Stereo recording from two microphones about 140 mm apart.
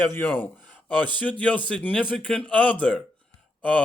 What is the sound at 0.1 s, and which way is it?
A man's voice, 15° left (ahead or behind).